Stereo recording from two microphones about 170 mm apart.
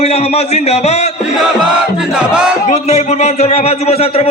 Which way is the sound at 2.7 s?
40° left (ahead or behind).